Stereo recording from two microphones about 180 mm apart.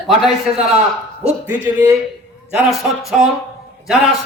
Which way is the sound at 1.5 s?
10° right (ahead or behind).